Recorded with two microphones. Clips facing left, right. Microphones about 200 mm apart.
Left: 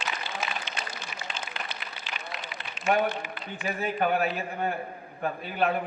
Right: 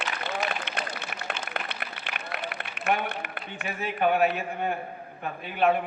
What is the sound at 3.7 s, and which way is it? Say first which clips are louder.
Speech: right 1 dB; 35° left (ahead or behind).